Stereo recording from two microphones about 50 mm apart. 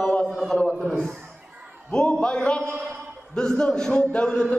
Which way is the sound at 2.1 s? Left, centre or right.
Centre.